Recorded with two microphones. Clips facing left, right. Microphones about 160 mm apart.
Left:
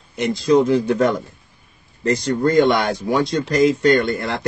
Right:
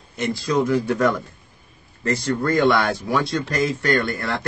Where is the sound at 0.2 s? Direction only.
20° left (ahead or behind).